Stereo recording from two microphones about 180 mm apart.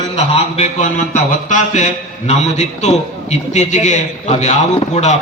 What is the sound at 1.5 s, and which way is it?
A man's voice, 45° left (ahead or behind).